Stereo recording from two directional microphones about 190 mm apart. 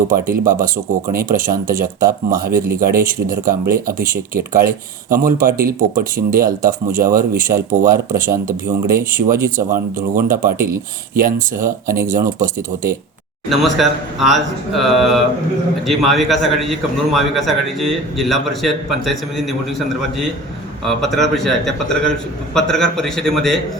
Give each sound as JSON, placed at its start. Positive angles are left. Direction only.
{"t": 0.1, "sound": "speech", "side_deg": -45}
{"t": 9.1, "sound": "speech", "side_deg": -45}
{"t": 13.5, "sound": "a man's voice", "side_deg": 0}
{"t": 20.8, "sound": "a man's voice", "side_deg": 0}